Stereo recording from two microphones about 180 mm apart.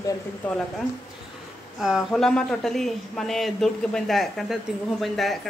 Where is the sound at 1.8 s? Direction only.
Centre (ahead or behind).